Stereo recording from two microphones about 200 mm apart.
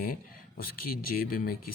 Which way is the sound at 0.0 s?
45° left (ahead or behind).